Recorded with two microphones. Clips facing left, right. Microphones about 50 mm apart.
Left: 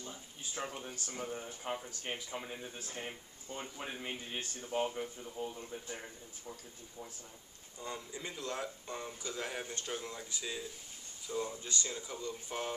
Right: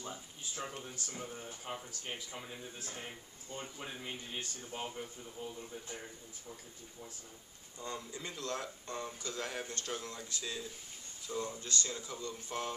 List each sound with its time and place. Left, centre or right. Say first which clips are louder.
0.6 s speech: left 2 dB; left
1.1 s speech: left 5 dB; centre
7.8 s speech: even; centre